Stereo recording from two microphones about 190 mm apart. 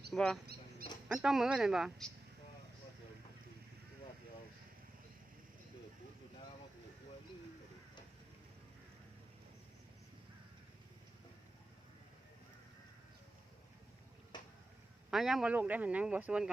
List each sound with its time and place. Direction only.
0.1 s speech: 5° left (ahead or behind)
14.3 s a sound: 25° left (ahead or behind)
15.1 s speech: centre (ahead or behind)